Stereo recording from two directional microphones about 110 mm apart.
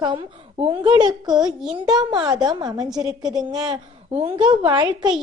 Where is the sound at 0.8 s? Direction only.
40° right (ahead or behind).